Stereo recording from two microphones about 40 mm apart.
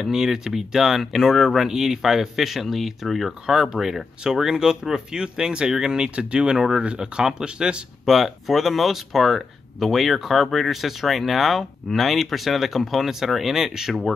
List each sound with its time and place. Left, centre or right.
0.0 s speech: centre
8.0 s speech: centre